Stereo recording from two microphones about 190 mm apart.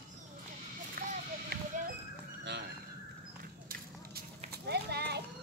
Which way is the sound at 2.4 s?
65° right (ahead or behind).